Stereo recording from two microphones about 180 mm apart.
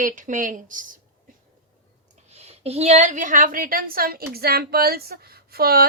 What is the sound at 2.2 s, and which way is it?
A woman's voice, 35° right (ahead or behind).